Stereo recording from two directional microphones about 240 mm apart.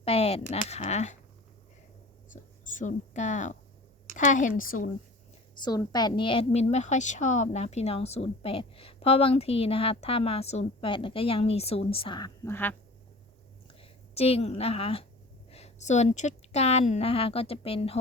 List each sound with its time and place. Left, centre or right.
0.0 s a sound: left
0.5 s a woman's voice: left
2.3 s a woman's voice: left
5.6 s a woman's voice: centre
13.7 s a woman's voice: left